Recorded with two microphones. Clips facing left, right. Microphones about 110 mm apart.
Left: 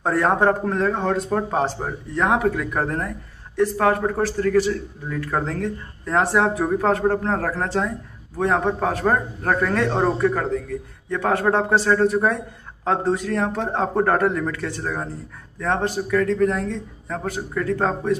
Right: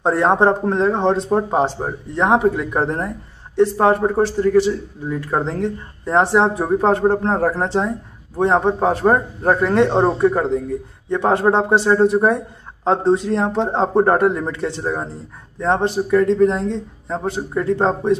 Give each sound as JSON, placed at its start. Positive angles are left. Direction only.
{"t": 0.0, "sound": "a man's voice", "side_deg": -25}